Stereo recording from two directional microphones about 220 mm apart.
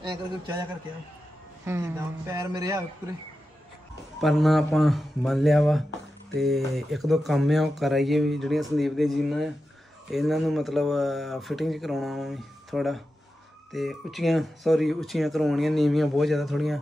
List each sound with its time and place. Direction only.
0.0 s a man's voice: 20° right (ahead or behind)
1.7 s speech: 10° right (ahead or behind)
4.2 s speech: centre (ahead or behind)